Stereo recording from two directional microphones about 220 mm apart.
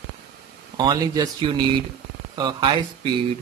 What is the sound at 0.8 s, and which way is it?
Speech, 20° right (ahead or behind).